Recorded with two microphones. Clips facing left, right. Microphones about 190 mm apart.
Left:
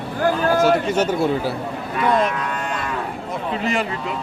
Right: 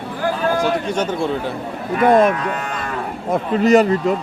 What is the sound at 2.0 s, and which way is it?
Speech, 50° right (ahead or behind).